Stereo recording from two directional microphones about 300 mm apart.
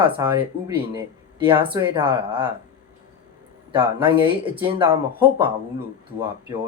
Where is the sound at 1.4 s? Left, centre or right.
Centre.